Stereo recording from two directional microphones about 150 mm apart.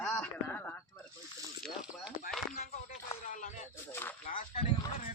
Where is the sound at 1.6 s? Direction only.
5° right (ahead or behind).